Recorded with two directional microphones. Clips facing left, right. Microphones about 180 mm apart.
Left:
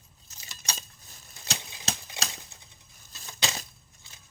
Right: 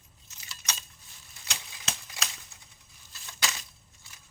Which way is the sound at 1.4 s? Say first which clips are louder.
Left 4 dB; 30° left (ahead or behind).